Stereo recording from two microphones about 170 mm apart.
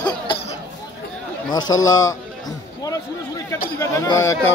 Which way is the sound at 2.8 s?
20° left (ahead or behind).